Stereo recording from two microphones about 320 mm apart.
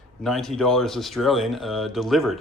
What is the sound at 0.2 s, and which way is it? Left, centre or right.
Speech, centre.